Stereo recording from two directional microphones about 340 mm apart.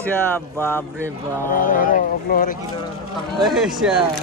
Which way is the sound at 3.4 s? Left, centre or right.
Centre.